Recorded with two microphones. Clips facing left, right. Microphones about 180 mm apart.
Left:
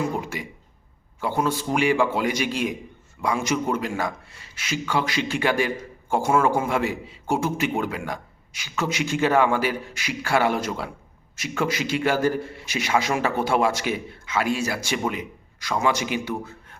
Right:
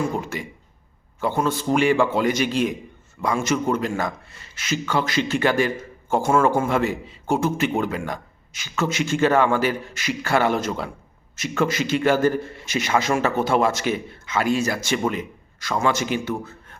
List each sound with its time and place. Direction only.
0.1 s a man's voice: 10° left (ahead or behind)